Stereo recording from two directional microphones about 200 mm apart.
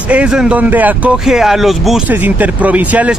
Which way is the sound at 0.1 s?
5° right (ahead or behind).